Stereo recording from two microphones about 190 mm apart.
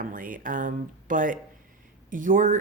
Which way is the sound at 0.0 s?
45° right (ahead or behind).